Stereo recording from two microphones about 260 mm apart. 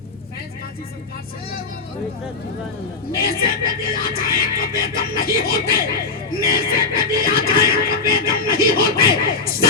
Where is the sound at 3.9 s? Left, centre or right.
Left.